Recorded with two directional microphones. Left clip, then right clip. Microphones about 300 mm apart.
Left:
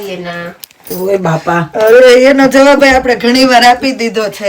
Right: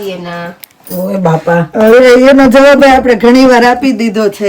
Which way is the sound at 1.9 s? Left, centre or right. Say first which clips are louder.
Even; centre.